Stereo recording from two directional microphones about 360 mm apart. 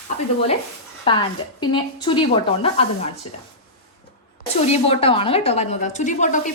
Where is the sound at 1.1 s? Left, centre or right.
Centre.